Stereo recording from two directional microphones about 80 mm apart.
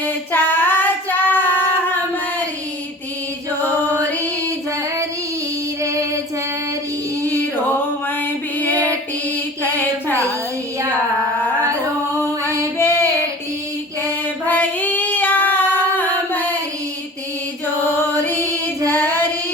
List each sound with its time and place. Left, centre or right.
0.0 s female singing: left
3.9 s music: right
5.8 s child singing: right
7.2 s music: right
8.7 s music: right
12.8 s child singing: left
14.4 s female singing: left
17.9 s music: left